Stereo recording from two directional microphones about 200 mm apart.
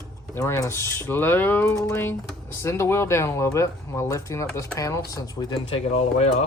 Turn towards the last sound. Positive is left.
turn(degrees=30)  # may be behind; listen again after turning